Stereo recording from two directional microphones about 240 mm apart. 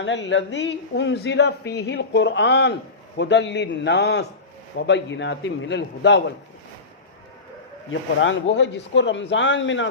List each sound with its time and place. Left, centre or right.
0.0 s a man's voice: left
7.9 s a man's voice: left